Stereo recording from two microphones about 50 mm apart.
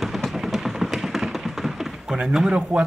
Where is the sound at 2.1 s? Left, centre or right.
Centre.